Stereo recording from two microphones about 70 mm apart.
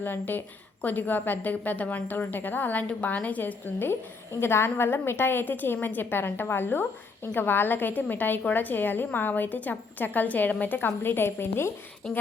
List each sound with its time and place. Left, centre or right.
0.0 s a woman's voice: left
12.0 s speech: centre